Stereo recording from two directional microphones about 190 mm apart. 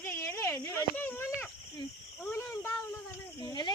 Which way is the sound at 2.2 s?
15° left (ahead or behind).